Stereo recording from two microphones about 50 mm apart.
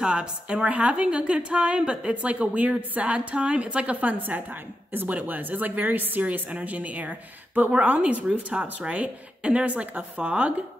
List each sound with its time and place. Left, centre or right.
0.0 s a woman's voice: centre